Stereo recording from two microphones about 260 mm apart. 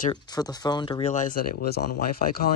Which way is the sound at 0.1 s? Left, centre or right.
Centre.